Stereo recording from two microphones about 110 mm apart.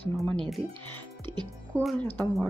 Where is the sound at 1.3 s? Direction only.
50° right (ahead or behind).